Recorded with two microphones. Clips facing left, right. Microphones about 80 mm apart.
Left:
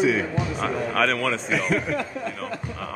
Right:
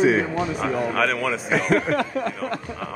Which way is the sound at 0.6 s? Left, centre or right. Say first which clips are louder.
Even; centre.